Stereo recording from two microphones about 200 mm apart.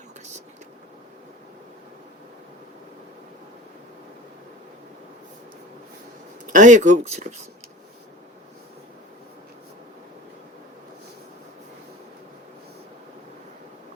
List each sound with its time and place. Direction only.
6.5 s speech: 35° right (ahead or behind)